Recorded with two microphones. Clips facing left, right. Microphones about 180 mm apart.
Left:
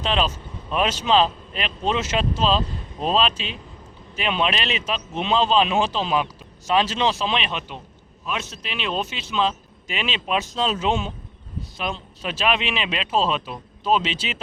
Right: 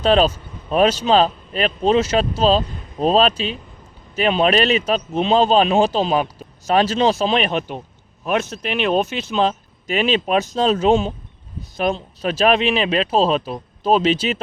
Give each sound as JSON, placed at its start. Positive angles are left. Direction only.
{"t": 0.0, "sound": "speech", "side_deg": -40}